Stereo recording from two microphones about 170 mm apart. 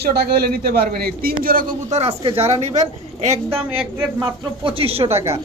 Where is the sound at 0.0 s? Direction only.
70° right (ahead or behind).